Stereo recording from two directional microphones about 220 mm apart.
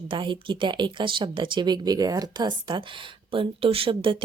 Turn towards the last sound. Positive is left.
turn(degrees=-25)  # may be behind; listen again after turning